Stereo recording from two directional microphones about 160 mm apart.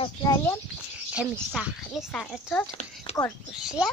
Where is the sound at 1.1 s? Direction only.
10° right (ahead or behind).